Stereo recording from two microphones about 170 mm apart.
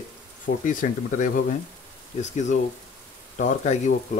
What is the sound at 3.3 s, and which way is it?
Speech, 45° left (ahead or behind).